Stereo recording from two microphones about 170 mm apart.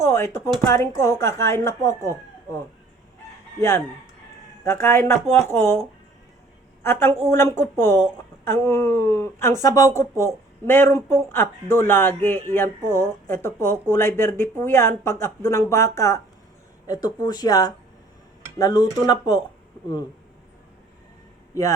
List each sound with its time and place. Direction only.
0.0 s speech: 15° left (ahead or behind)
3.6 s speech: 15° left (ahead or behind)
6.8 s speech: 15° left (ahead or behind)